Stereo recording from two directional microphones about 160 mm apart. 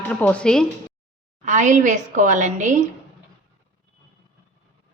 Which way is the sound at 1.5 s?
50° right (ahead or behind).